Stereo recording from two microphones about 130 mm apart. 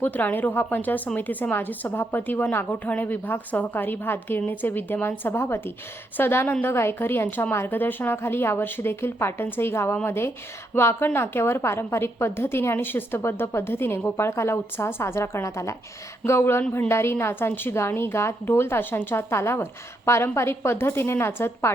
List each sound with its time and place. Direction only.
0.0 s a woman's voice: 15° left (ahead or behind)